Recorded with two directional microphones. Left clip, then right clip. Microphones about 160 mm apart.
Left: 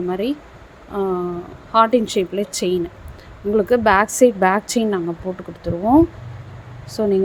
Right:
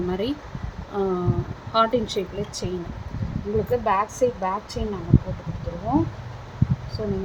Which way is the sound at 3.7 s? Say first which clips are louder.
Left 7 dB; 75° left (ahead or behind).